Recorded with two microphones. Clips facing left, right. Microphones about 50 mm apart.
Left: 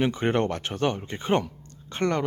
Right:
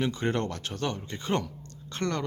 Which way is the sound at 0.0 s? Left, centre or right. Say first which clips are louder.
Left 5 dB; left.